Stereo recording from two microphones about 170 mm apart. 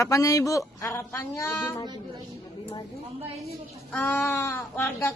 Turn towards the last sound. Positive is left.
turn(degrees=15)  # may be behind; listen again after turning